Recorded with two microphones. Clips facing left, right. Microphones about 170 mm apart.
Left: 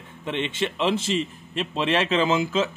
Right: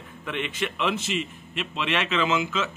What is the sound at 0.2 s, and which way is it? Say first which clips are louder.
A man's voice: left 3 dB; 30° left (ahead or behind).